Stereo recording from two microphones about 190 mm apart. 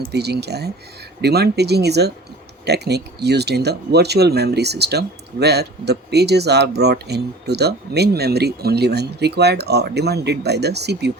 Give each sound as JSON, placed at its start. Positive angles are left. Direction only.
{"t": 0.1, "sound": "speech", "side_deg": -60}